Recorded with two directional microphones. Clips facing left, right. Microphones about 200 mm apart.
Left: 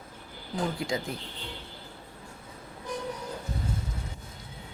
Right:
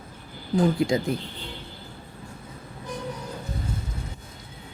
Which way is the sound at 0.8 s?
20° right (ahead or behind).